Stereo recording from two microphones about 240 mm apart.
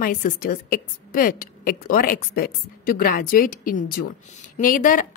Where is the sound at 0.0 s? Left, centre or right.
Left.